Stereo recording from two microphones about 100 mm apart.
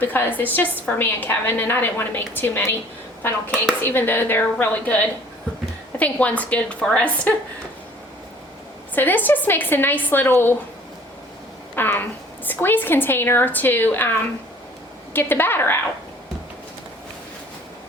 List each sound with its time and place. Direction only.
0.0 s a woman's voice: 20° left (ahead or behind)
9.0 s a woman's voice: 20° left (ahead or behind)
11.7 s a woman's voice: 20° left (ahead or behind)